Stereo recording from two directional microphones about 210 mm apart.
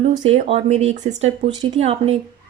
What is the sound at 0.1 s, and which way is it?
A woman's voice, 25° right (ahead or behind).